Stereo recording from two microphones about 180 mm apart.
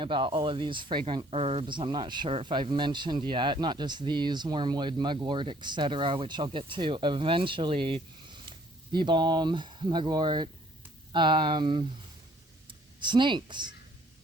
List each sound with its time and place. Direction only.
0.0 s speech: 30° right (ahead or behind)